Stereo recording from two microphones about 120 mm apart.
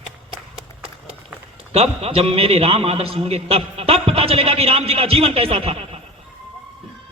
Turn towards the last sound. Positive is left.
turn(degrees=-50)  # may be behind; listen again after turning